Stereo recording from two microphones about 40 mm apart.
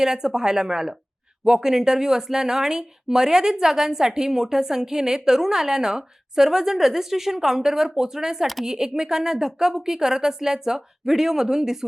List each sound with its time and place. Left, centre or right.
0.0 s speech: centre